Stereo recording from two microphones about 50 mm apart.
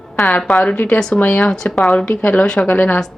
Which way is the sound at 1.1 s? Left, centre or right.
Left.